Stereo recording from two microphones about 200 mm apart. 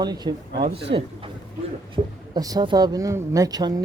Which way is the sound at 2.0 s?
30° right (ahead or behind).